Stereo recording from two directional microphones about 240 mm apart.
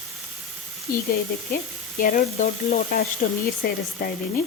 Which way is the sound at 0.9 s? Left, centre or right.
Left.